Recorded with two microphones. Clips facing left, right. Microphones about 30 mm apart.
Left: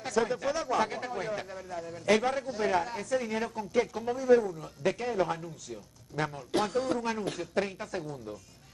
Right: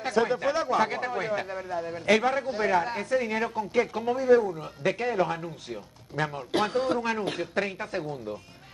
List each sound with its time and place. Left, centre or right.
0.0 s speech: right